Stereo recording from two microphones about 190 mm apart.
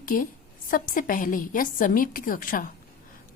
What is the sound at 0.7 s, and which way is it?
Speech, 45° left (ahead or behind).